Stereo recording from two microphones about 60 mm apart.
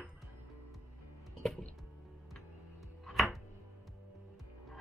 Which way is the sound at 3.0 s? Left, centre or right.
Centre.